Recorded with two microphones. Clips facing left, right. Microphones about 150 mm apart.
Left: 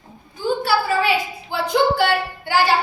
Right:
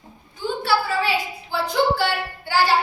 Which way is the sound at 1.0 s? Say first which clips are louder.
Left 3 dB; 20° left (ahead or behind).